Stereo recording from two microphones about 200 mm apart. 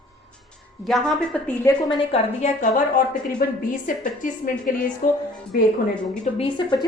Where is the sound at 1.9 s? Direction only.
35° left (ahead or behind).